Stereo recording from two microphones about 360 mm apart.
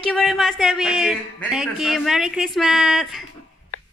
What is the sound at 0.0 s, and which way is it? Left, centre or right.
Speech, centre.